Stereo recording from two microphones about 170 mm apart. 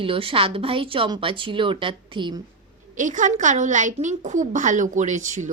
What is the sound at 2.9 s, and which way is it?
A woman's voice, 50° right (ahead or behind).